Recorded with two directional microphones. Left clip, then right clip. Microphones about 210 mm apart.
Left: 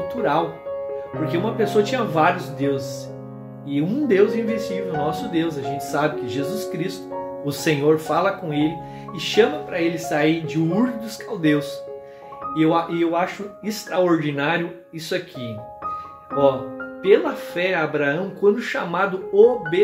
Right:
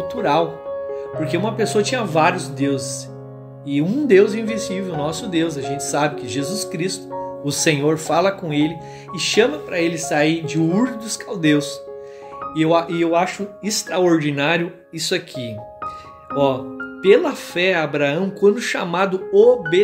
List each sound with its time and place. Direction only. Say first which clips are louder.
1.2 s speech: right 1 dB; 45° right (ahead or behind)
17.0 s speech: right 3 dB; 50° right (ahead or behind)